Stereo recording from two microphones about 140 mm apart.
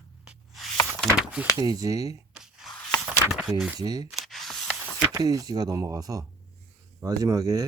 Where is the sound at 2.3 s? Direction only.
5° right (ahead or behind).